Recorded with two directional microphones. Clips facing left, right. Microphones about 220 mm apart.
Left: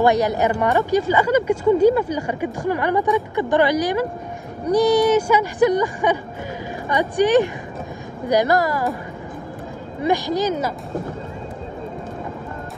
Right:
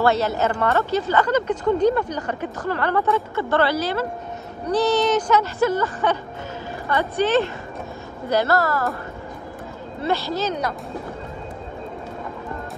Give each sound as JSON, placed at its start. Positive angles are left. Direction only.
{"t": 0.0, "sound": "speech", "side_deg": 15}
{"t": 10.0, "sound": "speech", "side_deg": 15}